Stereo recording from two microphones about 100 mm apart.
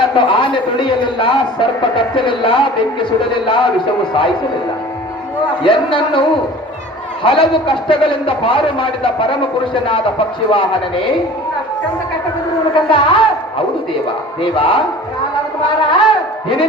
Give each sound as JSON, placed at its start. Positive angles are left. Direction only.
{"t": 0.2, "sound": "speech", "side_deg": 55}
{"t": 5.6, "sound": "speech", "side_deg": 60}
{"t": 12.7, "sound": "speech", "side_deg": 60}
{"t": 14.4, "sound": "speech", "side_deg": 60}
{"t": 15.9, "sound": "a sound", "side_deg": 60}